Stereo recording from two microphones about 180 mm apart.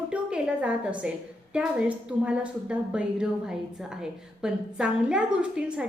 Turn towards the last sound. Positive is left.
turn(degrees=-5)  # may be behind; listen again after turning